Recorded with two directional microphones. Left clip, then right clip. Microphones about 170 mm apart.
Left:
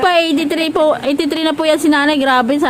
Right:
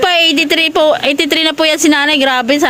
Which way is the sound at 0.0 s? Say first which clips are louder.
Right 3 dB; centre (ahead or behind).